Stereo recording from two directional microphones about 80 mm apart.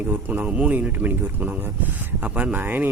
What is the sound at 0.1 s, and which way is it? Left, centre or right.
Speech, right.